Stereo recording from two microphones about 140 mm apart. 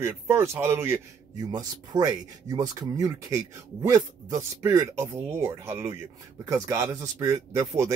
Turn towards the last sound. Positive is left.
turn(degrees=-20)  # may be behind; listen again after turning